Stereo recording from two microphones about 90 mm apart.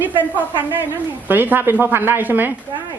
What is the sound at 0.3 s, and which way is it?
Speech, 20° right (ahead or behind).